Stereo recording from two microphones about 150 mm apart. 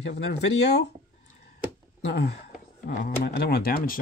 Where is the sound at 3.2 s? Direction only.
90° left.